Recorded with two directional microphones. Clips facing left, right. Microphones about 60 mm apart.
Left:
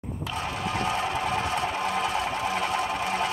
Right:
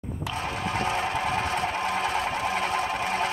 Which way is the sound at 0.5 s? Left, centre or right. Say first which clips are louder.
Even; right.